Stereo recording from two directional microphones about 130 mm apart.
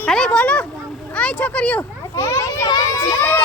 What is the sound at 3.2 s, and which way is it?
Speech, 15° left (ahead or behind).